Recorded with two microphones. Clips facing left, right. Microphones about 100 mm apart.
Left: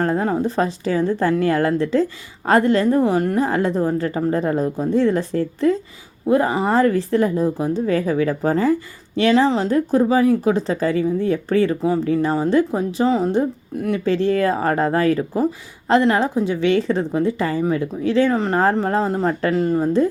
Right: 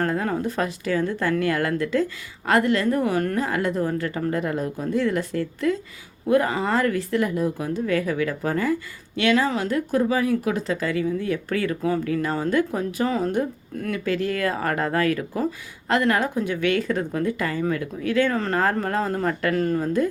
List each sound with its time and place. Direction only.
0.0 s speech: 25° left (ahead or behind)